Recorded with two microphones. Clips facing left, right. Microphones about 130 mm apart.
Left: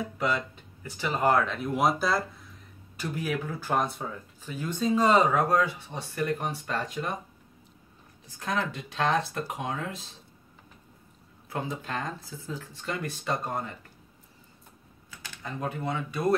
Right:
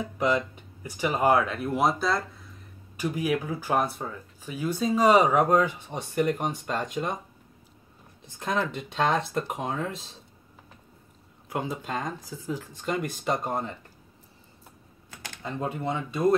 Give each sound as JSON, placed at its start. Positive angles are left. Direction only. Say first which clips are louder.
{"t": 0.2, "sound": "speech", "louder": "right 5 dB", "side_deg": -15}
{"t": 3.0, "sound": "speech", "louder": "right 4 dB", "side_deg": -10}
{"t": 8.3, "sound": "speech", "louder": "right 2 dB", "side_deg": -20}
{"t": 11.4, "sound": "speech", "louder": "right 2 dB", "side_deg": -15}
{"t": 15.4, "sound": "speech", "louder": "right 2 dB", "side_deg": -25}